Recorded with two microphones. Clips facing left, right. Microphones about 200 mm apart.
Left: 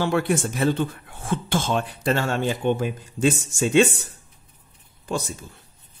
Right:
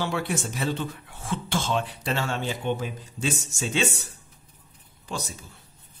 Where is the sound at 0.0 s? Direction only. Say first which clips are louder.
Left 6 dB; 55° left (ahead or behind).